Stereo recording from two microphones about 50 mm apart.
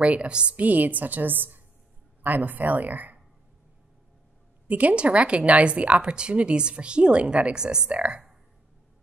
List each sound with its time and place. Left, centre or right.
0.0 s a woman's voice: right
0.6 s a woman's voice: right
4.6 s a woman's voice: right